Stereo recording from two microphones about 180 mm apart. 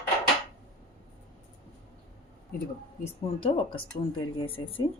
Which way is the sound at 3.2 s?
30° left (ahead or behind).